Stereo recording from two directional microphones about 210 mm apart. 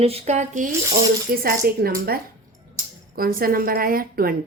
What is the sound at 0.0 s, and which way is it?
A woman's voice, 30° right (ahead or behind).